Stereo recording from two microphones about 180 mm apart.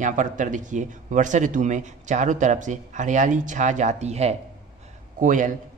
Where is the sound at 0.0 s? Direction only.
45° right (ahead or behind).